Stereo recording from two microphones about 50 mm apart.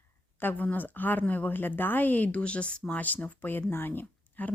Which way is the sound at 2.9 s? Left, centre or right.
Left.